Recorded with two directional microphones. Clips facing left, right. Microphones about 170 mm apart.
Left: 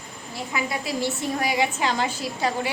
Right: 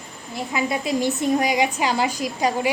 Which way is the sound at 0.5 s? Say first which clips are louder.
Right 5 dB; 20° right (ahead or behind).